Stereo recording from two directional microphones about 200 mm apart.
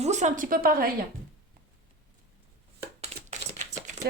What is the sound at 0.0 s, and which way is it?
Speech, 35° right (ahead or behind).